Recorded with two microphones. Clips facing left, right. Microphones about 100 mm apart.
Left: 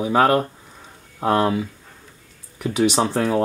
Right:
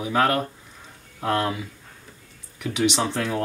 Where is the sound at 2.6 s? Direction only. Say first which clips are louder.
Left 4 dB; 40° left (ahead or behind).